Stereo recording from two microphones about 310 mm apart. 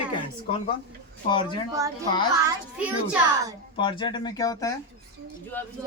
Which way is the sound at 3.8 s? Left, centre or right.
Centre.